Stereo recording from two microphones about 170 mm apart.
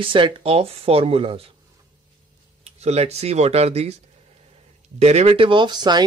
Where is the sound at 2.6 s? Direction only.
40° right (ahead or behind).